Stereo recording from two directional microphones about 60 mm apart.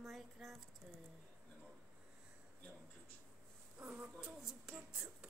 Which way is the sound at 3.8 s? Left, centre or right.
Centre.